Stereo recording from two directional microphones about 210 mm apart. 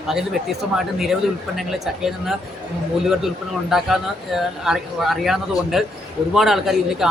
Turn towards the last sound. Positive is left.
turn(degrees=0)  # may be behind; listen again after turning